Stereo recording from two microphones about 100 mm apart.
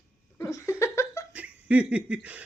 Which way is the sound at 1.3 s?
15° right (ahead or behind).